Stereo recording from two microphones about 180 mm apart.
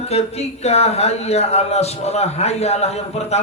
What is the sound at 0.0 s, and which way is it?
Speech, 35° left (ahead or behind).